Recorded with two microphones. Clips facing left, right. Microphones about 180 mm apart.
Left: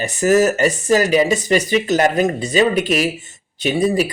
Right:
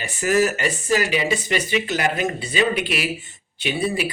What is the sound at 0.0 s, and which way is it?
Speech, 40° left (ahead or behind).